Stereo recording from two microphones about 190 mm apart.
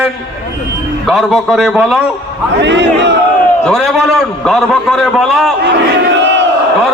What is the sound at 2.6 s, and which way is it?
Speech, 65° right (ahead or behind).